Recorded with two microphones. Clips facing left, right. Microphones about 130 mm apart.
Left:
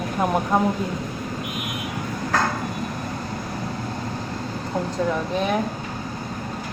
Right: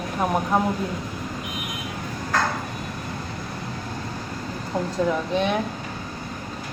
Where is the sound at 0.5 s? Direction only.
5° right (ahead or behind).